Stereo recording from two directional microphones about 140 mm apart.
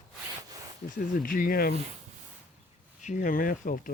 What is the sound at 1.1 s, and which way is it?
Speech, 90° left.